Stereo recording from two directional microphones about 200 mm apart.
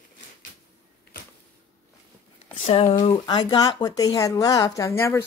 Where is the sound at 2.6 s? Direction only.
30° left (ahead or behind).